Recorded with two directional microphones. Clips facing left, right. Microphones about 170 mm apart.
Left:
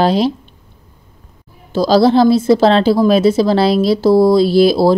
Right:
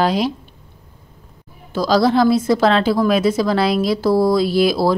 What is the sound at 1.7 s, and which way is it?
A woman's voice, 30° left (ahead or behind).